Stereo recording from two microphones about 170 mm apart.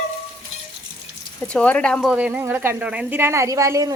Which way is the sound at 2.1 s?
5° right (ahead or behind).